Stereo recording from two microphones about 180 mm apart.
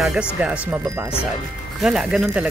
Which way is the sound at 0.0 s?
Centre (ahead or behind).